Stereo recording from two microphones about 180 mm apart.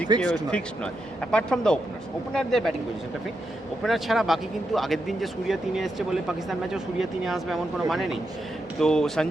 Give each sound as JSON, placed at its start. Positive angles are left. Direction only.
{"t": 0.2, "sound": "speech", "side_deg": 5}
{"t": 3.8, "sound": "speech", "side_deg": 0}